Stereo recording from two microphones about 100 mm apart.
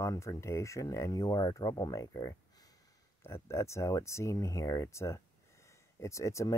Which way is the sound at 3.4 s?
30° left (ahead or behind).